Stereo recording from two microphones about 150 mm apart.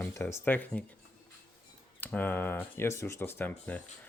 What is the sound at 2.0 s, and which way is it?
Speech, 10° left (ahead or behind).